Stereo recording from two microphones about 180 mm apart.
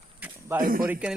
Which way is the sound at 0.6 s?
50° right (ahead or behind).